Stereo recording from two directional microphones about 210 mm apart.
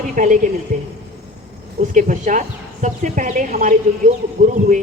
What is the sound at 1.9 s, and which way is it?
Speech, 40° right (ahead or behind).